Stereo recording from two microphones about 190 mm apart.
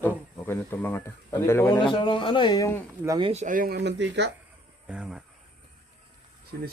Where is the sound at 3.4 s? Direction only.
45° right (ahead or behind); by 4.3 s 70° right (ahead or behind).